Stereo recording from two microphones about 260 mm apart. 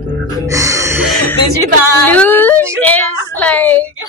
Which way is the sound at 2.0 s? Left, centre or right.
Centre.